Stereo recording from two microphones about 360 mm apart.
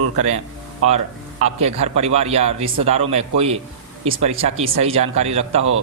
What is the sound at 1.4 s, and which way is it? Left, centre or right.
A man's voice, centre.